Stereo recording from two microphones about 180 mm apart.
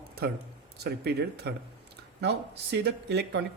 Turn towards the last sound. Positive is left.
turn(degrees=-65)  # may be behind; listen again after turning